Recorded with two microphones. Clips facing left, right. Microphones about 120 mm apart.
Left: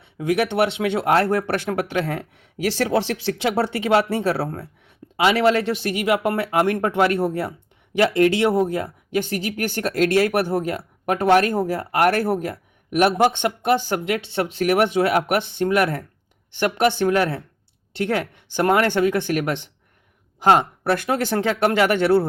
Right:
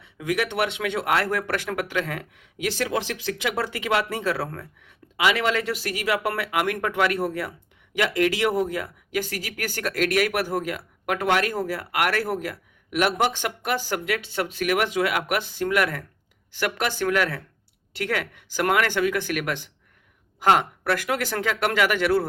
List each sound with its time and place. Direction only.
0.0 s speech: 30° left (ahead or behind)